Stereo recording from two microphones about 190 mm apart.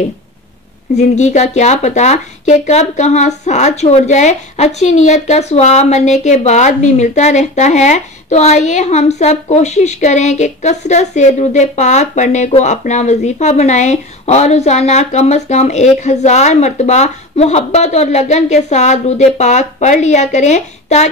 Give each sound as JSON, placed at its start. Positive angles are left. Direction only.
{"t": 0.9, "sound": "speech", "side_deg": 40}